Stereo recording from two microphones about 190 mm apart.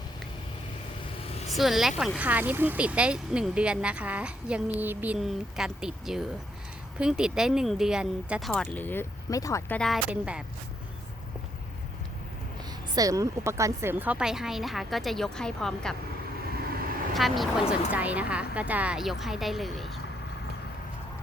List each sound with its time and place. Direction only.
1.3 s vehicle: 35° left (ahead or behind)
1.5 s speech: centre (ahead or behind)
12.9 s speech: 20° right (ahead or behind); by 16.0 s 5° left (ahead or behind)
17.2 s speech: centre (ahead or behind)